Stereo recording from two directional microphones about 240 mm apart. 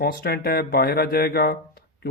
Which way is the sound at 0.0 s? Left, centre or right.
Left.